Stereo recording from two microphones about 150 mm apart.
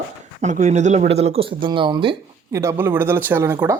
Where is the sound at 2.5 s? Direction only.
20° right (ahead or behind).